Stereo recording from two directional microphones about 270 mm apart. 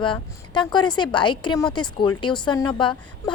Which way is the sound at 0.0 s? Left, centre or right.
Centre.